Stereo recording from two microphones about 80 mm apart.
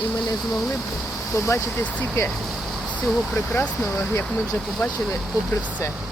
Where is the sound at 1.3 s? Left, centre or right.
Left.